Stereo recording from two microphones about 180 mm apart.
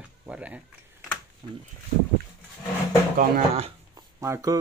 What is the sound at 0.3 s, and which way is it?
Speech, 5° right (ahead or behind).